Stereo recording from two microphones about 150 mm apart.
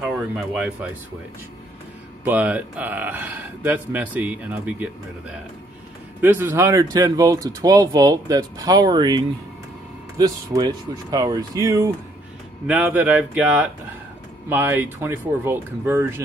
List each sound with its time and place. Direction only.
0.4 s speech: 5° right (ahead or behind)
2.2 s speech: 10° right (ahead or behind)